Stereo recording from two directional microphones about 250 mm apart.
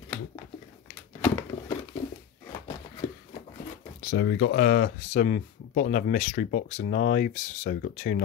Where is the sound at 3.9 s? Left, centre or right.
Left.